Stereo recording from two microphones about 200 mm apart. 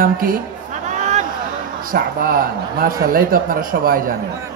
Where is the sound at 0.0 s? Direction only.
45° right (ahead or behind).